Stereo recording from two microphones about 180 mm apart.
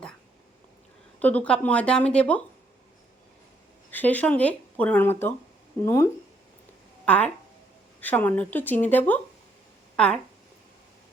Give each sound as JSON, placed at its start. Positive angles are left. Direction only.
{"t": 1.2, "sound": "speech", "side_deg": 10}
{"t": 3.9, "sound": "speech", "side_deg": 10}